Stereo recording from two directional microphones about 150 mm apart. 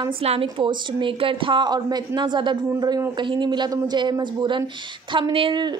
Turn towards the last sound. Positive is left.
turn(degrees=-30)  # may be behind; listen again after turning